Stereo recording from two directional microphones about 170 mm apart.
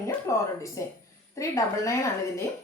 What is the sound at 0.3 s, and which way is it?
Speech, 20° left (ahead or behind).